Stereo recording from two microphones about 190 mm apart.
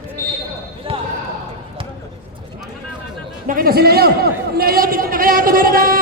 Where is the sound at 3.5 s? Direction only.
50° right (ahead or behind).